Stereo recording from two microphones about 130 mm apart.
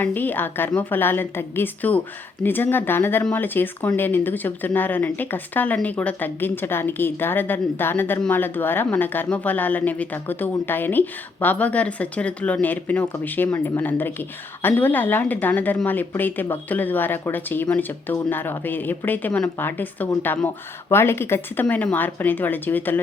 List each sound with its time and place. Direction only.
0.0 s speech: 15° left (ahead or behind)